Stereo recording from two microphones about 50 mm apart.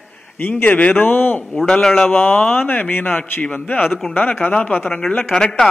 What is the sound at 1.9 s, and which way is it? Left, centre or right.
A man's voice, left.